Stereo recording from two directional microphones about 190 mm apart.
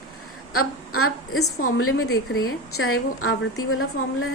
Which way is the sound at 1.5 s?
90° left.